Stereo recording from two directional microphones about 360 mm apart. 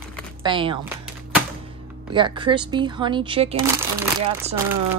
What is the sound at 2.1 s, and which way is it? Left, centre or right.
Speech, centre.